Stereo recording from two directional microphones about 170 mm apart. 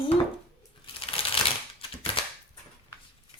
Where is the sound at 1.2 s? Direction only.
35° left (ahead or behind).